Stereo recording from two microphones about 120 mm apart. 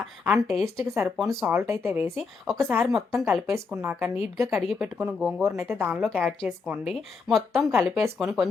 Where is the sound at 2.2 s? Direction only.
Centre (ahead or behind).